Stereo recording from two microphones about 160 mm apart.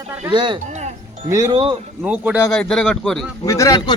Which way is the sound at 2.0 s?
10° right (ahead or behind).